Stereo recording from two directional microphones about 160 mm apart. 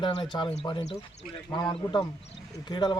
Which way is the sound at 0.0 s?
30° left (ahead or behind).